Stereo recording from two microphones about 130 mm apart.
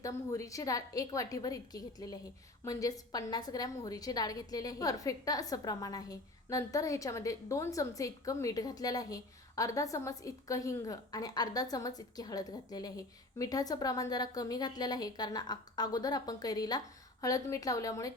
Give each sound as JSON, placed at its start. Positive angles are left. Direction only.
{"t": 0.0, "sound": "a woman's voice", "side_deg": 25}